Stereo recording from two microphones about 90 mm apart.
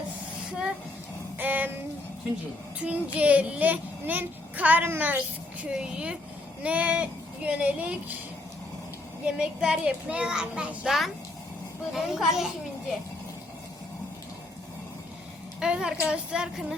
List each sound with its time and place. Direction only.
1.4 s a sound: 20° right (ahead or behind)
2.8 s a child's voice: 15° right (ahead or behind)
9.2 s a child's voice: 10° right (ahead or behind)
15.6 s a child's voice: 10° right (ahead or behind)